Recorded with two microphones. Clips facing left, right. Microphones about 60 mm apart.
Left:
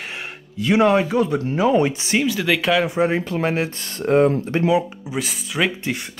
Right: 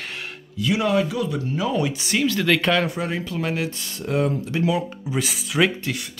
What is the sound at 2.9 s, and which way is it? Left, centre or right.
Speech, left.